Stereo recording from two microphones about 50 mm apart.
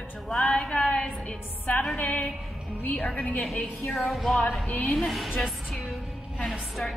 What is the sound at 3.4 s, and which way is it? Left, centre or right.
Speech, centre.